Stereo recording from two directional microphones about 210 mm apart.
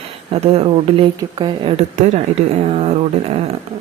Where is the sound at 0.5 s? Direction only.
25° right (ahead or behind).